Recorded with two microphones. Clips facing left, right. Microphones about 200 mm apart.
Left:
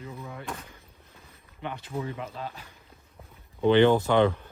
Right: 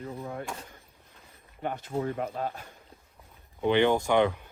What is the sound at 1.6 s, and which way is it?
Speech, 45° right (ahead or behind).